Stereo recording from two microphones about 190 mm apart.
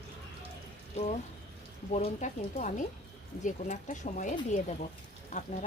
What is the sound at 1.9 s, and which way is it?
Speech, 35° left (ahead or behind).